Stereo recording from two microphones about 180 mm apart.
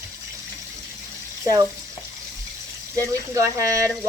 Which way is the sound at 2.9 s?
20° right (ahead or behind).